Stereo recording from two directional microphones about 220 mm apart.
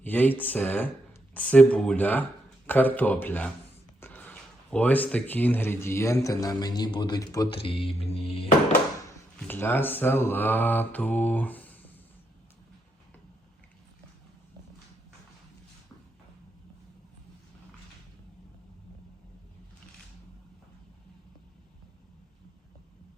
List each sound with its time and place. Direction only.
0.0 s speech: 10° left (ahead or behind); by 8.4 s 25° left (ahead or behind)
9.5 s speech: 10° left (ahead or behind)